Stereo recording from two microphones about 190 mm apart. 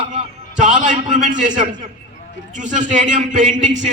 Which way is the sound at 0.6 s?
40° right (ahead or behind).